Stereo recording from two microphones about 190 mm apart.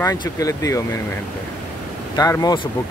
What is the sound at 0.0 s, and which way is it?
Speech, 15° left (ahead or behind).